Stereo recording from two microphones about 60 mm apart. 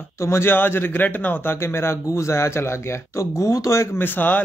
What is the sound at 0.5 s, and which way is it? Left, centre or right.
Speech, left.